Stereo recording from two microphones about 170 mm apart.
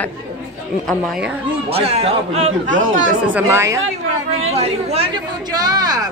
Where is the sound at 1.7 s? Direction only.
35° right (ahead or behind).